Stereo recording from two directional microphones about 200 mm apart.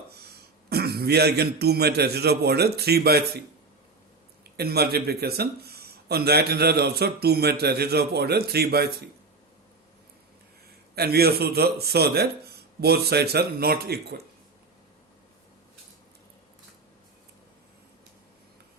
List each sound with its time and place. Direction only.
0.3 s a man's voice: 50° right (ahead or behind)
4.5 s a man's voice: 50° right (ahead or behind)
10.9 s a man's voice: 50° right (ahead or behind)